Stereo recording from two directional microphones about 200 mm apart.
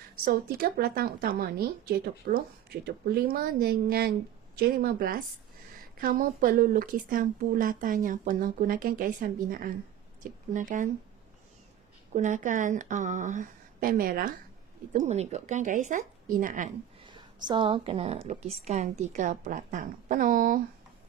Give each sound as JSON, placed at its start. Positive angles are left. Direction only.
{"t": 0.2, "sound": "a woman's voice", "side_deg": -50}
{"t": 12.1, "sound": "a woman's voice", "side_deg": -35}
{"t": 14.9, "sound": "a woman's voice", "side_deg": -35}
{"t": 17.0, "sound": "a woman's voice", "side_deg": -20}